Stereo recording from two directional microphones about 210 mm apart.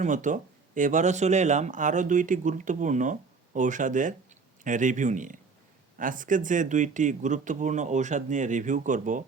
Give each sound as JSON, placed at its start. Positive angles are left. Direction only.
{"t": 0.0, "sound": "speech", "side_deg": -35}